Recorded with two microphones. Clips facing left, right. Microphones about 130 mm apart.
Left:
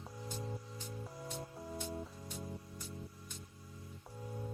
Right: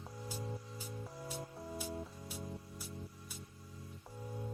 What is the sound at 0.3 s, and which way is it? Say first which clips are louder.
Music: even; 5° right (ahead or behind).